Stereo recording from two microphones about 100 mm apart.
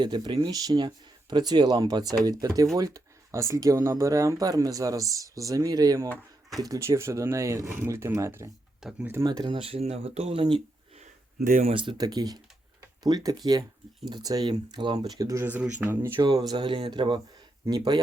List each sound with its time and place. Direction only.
0.0 s speech: 50° right (ahead or behind); by 8.4 s 30° right (ahead or behind)
8.8 s speech: 5° right (ahead or behind)
9.2 s speech: 40° right (ahead or behind)
9.5 s speech: 70° right (ahead or behind); by 10.4 s 85° right
11.6 s speech: 60° right (ahead or behind)
11.9 s speech: 40° right (ahead or behind)
15.8 s speech: 20° right (ahead or behind)
16.2 s speech: 45° right (ahead or behind)